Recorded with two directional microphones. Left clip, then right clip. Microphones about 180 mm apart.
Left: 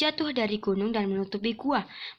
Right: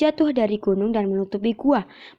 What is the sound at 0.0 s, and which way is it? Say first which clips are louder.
A woman's voice: right 8 dB; 35° right (ahead or behind).